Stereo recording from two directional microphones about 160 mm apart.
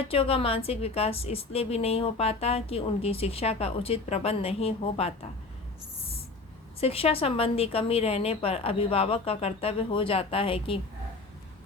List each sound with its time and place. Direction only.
0.1 s a woman's voice: 35° left (ahead or behind)
6.7 s a woman's voice: 40° left (ahead or behind)